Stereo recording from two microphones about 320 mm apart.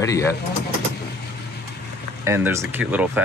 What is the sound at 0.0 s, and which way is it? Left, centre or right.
Speech, centre.